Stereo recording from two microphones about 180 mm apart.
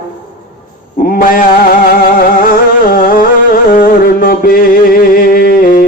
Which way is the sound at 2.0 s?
55° left (ahead or behind).